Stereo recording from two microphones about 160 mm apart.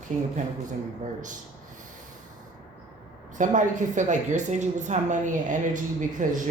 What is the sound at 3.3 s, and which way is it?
Speech, 50° right (ahead or behind).